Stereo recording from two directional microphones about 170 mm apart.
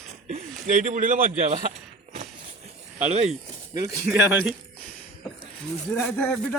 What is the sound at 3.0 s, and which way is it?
Speech, 40° right (ahead or behind).